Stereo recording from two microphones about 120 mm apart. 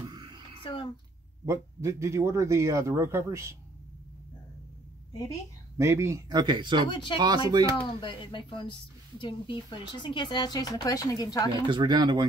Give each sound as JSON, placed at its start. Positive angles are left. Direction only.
{"t": 0.0, "sound": "a sound", "side_deg": -35}
{"t": 0.7, "sound": "a woman's voice", "side_deg": 45}
{"t": 1.4, "sound": "a man's voice", "side_deg": -25}
{"t": 5.8, "sound": "speech", "side_deg": -25}
{"t": 6.9, "sound": "speech", "side_deg": 40}
{"t": 7.2, "sound": "speech", "side_deg": -35}
{"t": 7.7, "sound": "speech", "side_deg": 40}
{"t": 11.6, "sound": "speech", "side_deg": -40}